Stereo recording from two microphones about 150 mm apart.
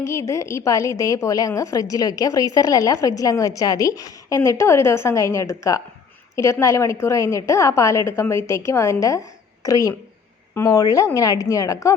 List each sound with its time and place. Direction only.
0.0 s a woman's voice: 20° left (ahead or behind)